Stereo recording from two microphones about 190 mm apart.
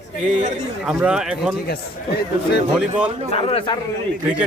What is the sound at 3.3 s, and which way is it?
Speech, 30° left (ahead or behind).